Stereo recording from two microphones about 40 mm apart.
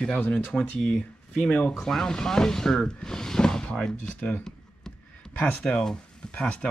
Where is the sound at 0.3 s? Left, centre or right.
Left.